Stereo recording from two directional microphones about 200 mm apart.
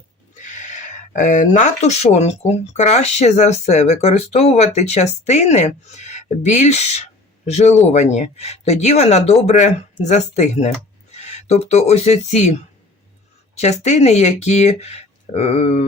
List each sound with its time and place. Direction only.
0.3 s speech: 35° left (ahead or behind)
13.6 s speech: 35° left (ahead or behind)